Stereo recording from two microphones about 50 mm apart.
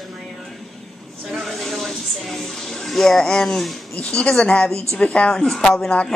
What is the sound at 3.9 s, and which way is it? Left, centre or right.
Speech, left.